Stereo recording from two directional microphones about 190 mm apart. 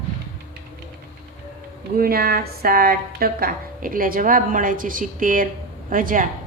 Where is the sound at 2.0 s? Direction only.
50° right (ahead or behind).